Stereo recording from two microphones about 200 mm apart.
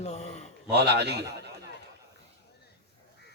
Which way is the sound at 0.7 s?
55° right (ahead or behind).